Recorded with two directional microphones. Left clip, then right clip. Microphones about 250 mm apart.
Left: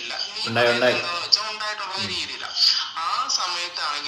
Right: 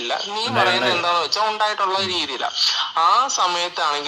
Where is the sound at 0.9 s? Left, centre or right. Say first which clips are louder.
Right 3 dB; centre.